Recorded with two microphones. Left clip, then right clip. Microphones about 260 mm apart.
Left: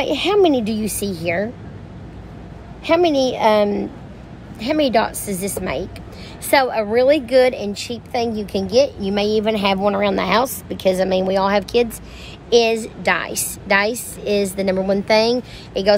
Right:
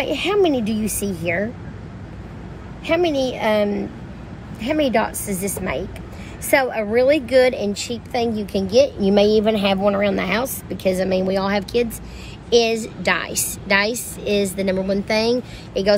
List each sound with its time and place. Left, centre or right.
0.0 s a woman's voice: centre
2.9 s a woman's voice: centre
5.6 s a woman's voice: centre
9.0 s a woman's voice: centre